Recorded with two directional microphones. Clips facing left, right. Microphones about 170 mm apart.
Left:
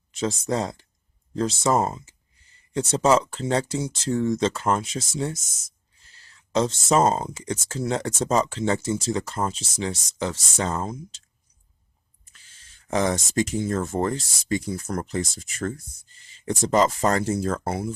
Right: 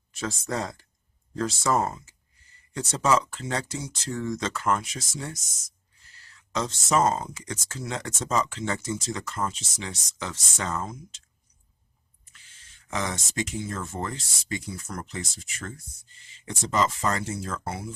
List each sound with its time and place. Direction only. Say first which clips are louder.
0.1 s speech: left 6 dB; 20° left (ahead or behind)
12.9 s speech: left 8 dB; 35° left (ahead or behind)